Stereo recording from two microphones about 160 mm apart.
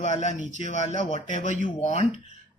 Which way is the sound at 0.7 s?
45° left (ahead or behind).